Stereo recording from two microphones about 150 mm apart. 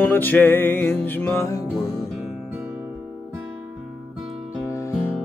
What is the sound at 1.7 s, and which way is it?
Music, centre (ahead or behind).